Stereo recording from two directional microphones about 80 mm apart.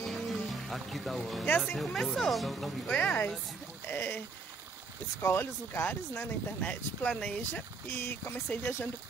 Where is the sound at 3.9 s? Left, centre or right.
Left.